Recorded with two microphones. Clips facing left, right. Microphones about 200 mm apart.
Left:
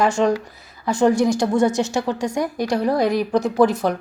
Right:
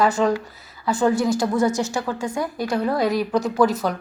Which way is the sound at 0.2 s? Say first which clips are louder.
Left 2 dB; 25° left (ahead or behind).